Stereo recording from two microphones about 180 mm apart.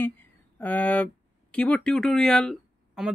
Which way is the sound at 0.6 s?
10° left (ahead or behind).